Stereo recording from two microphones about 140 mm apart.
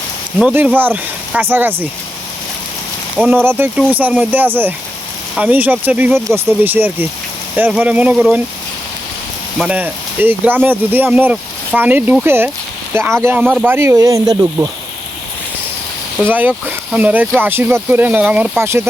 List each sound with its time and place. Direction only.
0.3 s speech: 10° right (ahead or behind)
3.2 s speech: 15° right (ahead or behind)
9.6 s speech: 10° right (ahead or behind)
13.7 s speech: 20° right (ahead or behind)
16.3 s speech: 10° right (ahead or behind)